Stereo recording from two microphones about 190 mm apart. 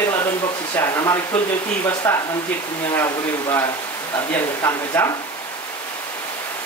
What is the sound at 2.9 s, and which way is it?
Speech, 15° left (ahead or behind).